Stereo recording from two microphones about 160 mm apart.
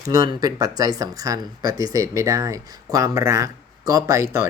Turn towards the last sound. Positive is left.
turn(degrees=-20)  # may be behind; listen again after turning